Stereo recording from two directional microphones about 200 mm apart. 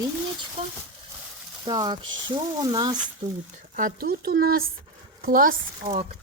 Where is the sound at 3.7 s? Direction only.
45° right (ahead or behind).